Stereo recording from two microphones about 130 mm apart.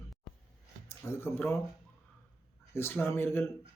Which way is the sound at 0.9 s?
20° left (ahead or behind).